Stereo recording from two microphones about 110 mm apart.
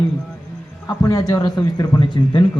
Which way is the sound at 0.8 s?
35° left (ahead or behind).